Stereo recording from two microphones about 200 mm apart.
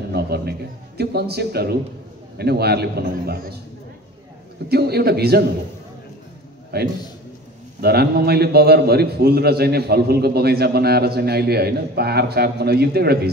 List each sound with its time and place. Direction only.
0.1 s a man's voice: 50° right (ahead or behind)
4.6 s a man's voice: 50° right (ahead or behind)
6.7 s a man's voice: 55° right (ahead or behind)